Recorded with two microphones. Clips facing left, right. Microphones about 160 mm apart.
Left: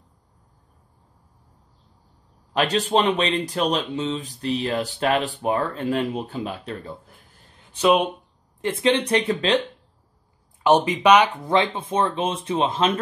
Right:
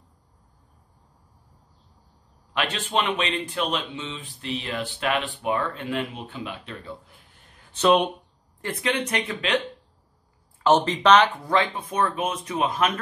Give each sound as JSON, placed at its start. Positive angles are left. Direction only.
{"t": 2.5, "sound": "speech", "side_deg": 40}
{"t": 7.7, "sound": "speech", "side_deg": 10}
{"t": 8.5, "sound": "speech", "side_deg": 25}
{"t": 10.6, "sound": "speech", "side_deg": 15}
{"t": 11.4, "sound": "speech", "side_deg": 20}